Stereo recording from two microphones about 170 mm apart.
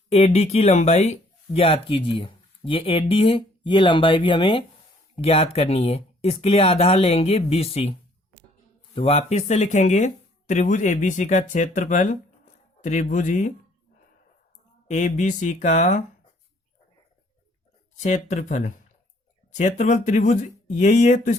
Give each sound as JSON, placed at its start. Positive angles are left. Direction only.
{"t": 0.1, "sound": "speech", "side_deg": 40}
{"t": 9.0, "sound": "speech", "side_deg": 35}
{"t": 14.8, "sound": "speech", "side_deg": 45}
{"t": 18.0, "sound": "speech", "side_deg": 45}